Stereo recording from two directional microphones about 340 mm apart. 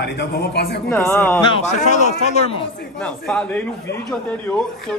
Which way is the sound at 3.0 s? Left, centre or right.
Centre.